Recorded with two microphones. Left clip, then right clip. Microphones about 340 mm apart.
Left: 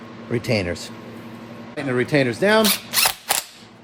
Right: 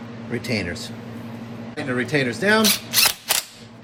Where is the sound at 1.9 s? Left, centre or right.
Left.